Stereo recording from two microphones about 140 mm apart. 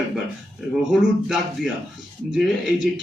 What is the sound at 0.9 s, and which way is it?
Speech, 5° right (ahead or behind).